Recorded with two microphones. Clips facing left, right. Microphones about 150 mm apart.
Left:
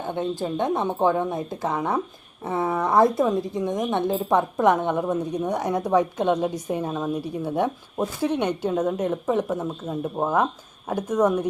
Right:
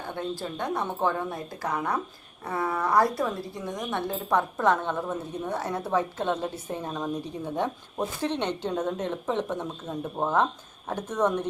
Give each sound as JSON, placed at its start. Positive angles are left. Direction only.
{"t": 0.0, "sound": "a woman's voice", "side_deg": 20}